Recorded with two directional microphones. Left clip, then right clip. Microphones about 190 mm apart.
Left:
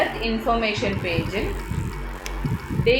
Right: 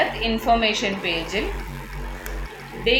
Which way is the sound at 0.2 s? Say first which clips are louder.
Right 3 dB; 30° right (ahead or behind).